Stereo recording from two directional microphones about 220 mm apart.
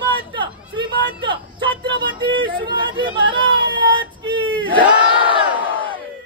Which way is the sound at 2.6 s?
20° right (ahead or behind).